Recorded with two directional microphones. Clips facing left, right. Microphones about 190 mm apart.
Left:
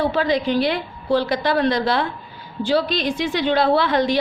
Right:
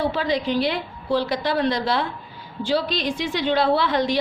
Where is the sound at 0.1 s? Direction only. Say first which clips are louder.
Left 3 dB; 55° left (ahead or behind).